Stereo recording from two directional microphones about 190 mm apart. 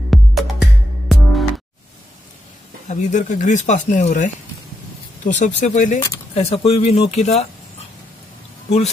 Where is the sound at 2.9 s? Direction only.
40° left (ahead or behind).